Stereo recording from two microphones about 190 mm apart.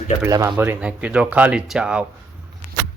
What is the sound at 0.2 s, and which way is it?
Speech, 15° right (ahead or behind).